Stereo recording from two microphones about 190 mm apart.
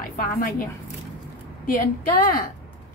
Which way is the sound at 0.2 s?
50° left (ahead or behind).